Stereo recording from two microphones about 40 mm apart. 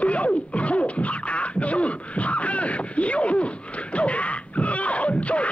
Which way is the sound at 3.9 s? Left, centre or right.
Left.